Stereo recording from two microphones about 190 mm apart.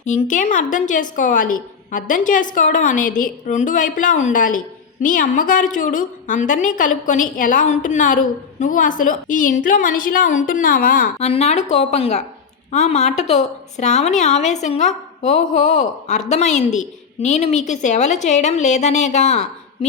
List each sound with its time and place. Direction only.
0.0 s a woman's voice: 40° left (ahead or behind)
11.3 s a woman's voice: 35° left (ahead or behind)